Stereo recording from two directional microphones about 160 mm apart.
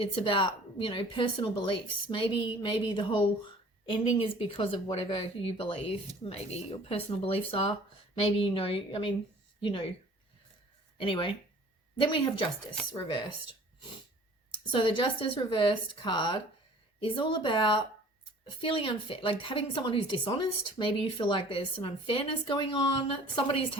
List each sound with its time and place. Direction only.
0.0 s speech: 35° left (ahead or behind)
11.0 s speech: 30° left (ahead or behind)
14.7 s speech: 35° left (ahead or behind)